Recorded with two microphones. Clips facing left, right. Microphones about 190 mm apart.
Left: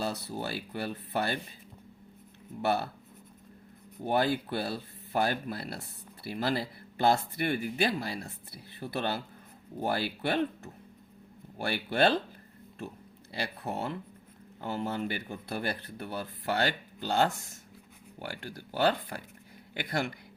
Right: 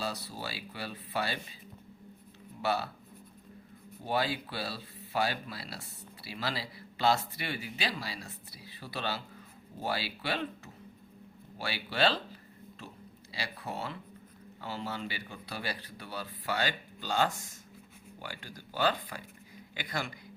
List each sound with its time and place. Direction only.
0.0 s speech: 55° left (ahead or behind)
2.6 s speech: 55° left (ahead or behind)
4.0 s speech: 55° left (ahead or behind)
13.3 s speech: 55° left (ahead or behind)
18.4 s speech: 60° left (ahead or behind)